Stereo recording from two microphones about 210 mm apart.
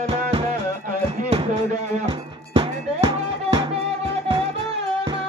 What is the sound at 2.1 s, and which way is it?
Music, 25° right (ahead or behind).